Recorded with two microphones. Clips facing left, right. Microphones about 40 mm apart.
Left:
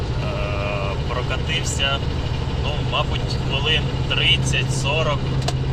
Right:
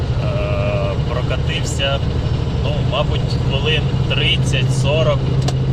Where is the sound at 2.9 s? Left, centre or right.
Centre.